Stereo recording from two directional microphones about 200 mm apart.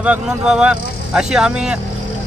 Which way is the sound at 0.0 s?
5° right (ahead or behind).